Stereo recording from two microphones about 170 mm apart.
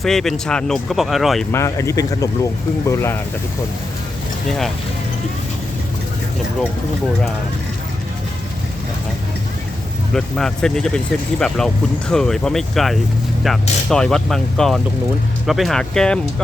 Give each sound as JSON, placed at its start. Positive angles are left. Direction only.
{"t": 0.0, "sound": "speech", "side_deg": 0}
{"t": 1.5, "sound": "speech", "side_deg": 15}
{"t": 10.2, "sound": "speech", "side_deg": 5}